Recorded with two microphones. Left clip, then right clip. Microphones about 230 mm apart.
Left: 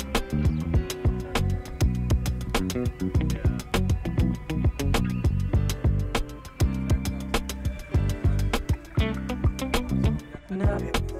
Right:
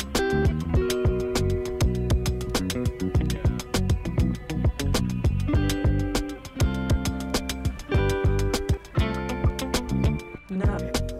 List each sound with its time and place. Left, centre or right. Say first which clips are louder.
0.2 s music: right 8 dB; centre